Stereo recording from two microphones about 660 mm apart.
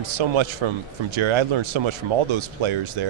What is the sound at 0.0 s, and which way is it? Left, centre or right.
Speech, right.